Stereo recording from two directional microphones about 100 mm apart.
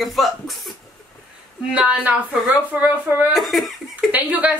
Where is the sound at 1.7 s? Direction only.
15° right (ahead or behind).